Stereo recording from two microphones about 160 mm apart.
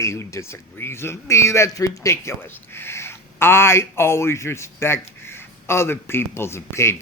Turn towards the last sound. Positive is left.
turn(degrees=15)  # may be behind; listen again after turning